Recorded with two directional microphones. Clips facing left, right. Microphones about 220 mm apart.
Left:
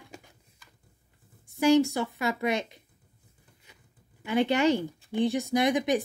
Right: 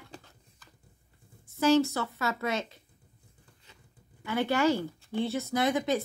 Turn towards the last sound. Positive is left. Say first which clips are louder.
# left 3 dB
turn(degrees=15)  # may be behind; listen again after turning